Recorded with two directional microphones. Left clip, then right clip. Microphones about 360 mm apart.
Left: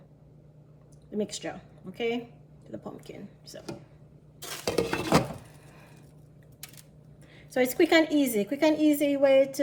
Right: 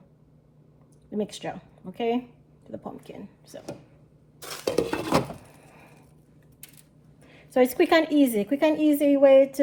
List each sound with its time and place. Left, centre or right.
1.1 s a woman's voice: centre
2.6 s speech: centre
4.4 s stir: centre
4.7 s dishes: centre
7.5 s a woman's voice: centre